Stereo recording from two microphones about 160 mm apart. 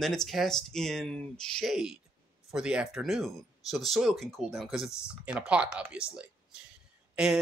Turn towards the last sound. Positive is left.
turn(degrees=-5)  # may be behind; listen again after turning